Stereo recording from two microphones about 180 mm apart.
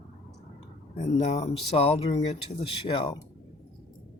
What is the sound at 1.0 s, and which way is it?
Speech, 40° left (ahead or behind).